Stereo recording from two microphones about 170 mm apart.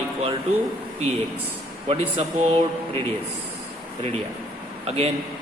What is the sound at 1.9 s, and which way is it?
A man's voice, 35° right (ahead or behind).